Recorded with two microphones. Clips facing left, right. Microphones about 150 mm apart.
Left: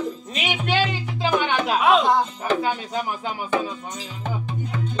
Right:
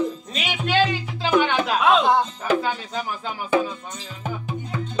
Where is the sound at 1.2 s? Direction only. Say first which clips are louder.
Right 2 dB; 10° left (ahead or behind).